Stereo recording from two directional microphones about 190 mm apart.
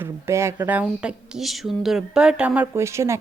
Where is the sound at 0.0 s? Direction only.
15° right (ahead or behind).